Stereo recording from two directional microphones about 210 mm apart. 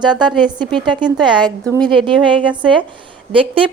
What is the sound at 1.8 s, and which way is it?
Speech, 5° left (ahead or behind).